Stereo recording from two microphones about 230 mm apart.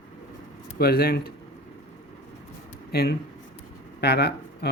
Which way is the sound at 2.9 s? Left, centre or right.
Left.